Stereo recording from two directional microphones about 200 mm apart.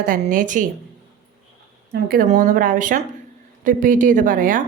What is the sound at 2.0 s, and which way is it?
A woman's voice, 45° right (ahead or behind).